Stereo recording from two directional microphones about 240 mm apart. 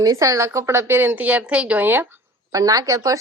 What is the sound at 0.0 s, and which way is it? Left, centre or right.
Speech, centre.